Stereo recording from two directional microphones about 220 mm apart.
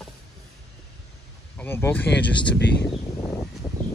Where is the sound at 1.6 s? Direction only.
10° left (ahead or behind).